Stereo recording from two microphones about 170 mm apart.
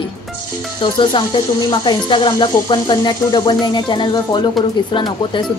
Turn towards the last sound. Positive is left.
turn(degrees=25)  # may be behind; listen again after turning